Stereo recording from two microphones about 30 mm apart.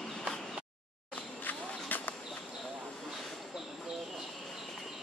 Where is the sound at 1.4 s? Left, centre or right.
Left.